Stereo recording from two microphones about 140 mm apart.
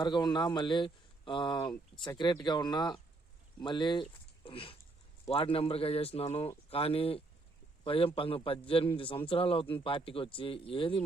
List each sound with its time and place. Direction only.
0.0 s speech: 30° left (ahead or behind)
1.7 s speech: 10° left (ahead or behind)
2.1 s speech: 30° left (ahead or behind)